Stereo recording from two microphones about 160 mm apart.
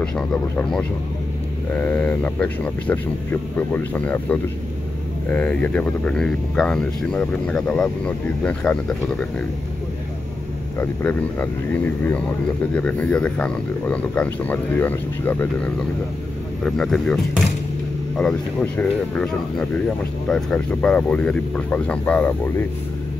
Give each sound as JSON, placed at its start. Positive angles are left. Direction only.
{"t": 0.6, "sound": "speech", "side_deg": 5}
{"t": 10.8, "sound": "speech", "side_deg": 10}
{"t": 12.7, "sound": "speech", "side_deg": 10}